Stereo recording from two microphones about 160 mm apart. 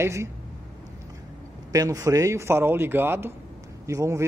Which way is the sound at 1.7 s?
20° right (ahead or behind).